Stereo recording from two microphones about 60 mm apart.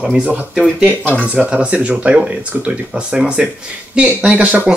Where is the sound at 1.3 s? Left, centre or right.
Right.